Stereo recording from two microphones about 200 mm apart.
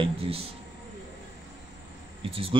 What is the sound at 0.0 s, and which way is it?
Speech, 30° right (ahead or behind).